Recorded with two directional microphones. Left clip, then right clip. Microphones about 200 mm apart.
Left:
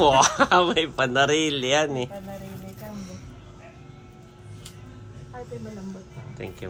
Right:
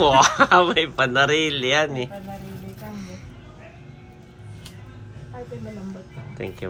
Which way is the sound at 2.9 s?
15° left (ahead or behind).